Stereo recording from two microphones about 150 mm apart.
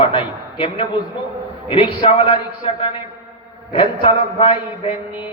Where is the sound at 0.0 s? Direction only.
35° left (ahead or behind).